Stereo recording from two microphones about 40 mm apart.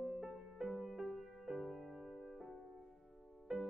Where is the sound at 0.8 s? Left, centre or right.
Centre.